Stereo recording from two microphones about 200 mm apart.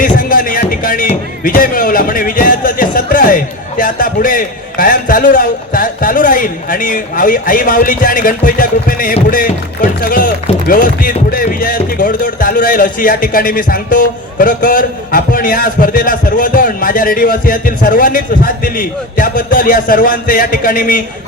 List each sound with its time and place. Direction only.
0.0 s music: 45° left (ahead or behind)
1.5 s speech: 45° left (ahead or behind)